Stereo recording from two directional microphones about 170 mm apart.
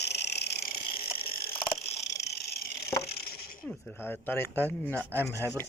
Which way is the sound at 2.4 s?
70° left (ahead or behind).